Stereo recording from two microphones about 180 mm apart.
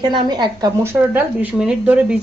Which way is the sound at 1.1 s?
5° right (ahead or behind).